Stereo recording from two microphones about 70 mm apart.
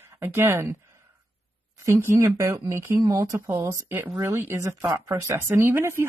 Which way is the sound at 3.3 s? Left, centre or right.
Right.